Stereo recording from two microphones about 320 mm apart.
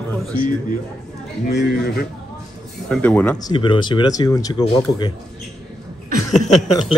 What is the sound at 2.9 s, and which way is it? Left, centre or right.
Speech, centre.